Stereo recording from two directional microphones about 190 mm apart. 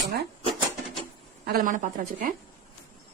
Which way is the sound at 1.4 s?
50° right (ahead or behind).